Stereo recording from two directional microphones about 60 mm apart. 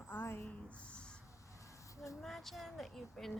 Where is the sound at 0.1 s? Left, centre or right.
Left.